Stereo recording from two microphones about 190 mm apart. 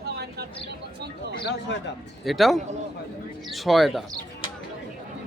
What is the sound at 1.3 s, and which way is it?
Speech, 60° left (ahead or behind).